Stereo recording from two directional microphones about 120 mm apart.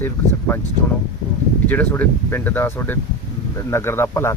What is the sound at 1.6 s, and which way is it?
Speech, 15° left (ahead or behind).